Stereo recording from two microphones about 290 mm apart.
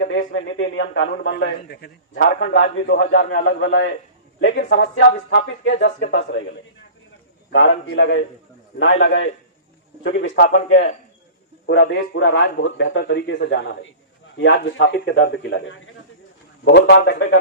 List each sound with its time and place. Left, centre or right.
0.1 s a man's voice: left
7.5 s a man's voice: left
10.5 s a man's voice: left